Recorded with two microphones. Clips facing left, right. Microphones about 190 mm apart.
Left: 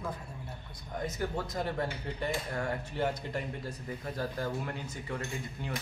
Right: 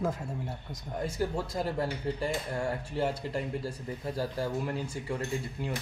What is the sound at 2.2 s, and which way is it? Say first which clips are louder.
Speech: left 2 dB; 30° right (ahead or behind).